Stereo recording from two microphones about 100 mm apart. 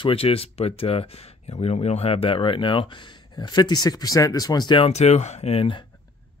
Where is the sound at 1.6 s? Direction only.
90° left; by 2.8 s 55° left (ahead or behind).